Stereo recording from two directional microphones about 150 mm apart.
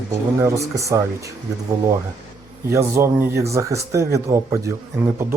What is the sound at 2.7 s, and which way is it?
Speech, 15° right (ahead or behind).